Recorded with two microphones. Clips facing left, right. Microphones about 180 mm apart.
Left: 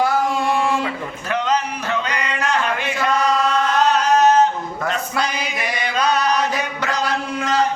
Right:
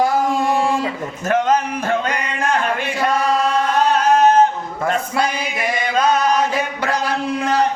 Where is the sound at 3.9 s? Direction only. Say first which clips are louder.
Right 2 dB; 50° right (ahead or behind).